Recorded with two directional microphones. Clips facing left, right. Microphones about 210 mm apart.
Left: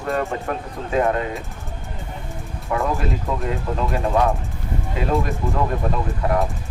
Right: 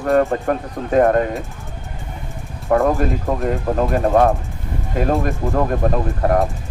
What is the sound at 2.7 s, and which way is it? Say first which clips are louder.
Speech: right 7 dB; 50° right (ahead or behind).